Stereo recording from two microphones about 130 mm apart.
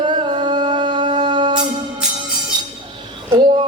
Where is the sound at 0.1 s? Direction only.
40° right (ahead or behind).